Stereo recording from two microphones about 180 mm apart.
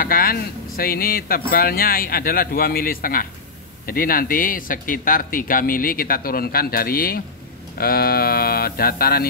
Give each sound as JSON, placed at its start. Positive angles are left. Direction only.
{"t": 0.0, "sound": "a man's voice", "side_deg": 55}